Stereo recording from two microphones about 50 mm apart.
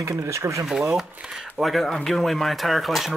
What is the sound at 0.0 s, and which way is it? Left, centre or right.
Speech, right.